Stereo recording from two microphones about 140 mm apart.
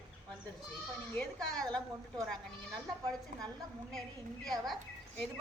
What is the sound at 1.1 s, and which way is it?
A woman's voice, 10° left (ahead or behind).